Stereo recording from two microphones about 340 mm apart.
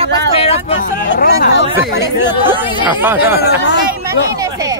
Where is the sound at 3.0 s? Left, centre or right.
Centre.